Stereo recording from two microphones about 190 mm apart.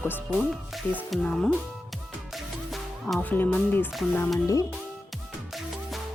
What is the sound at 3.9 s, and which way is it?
Speech, 5° left (ahead or behind).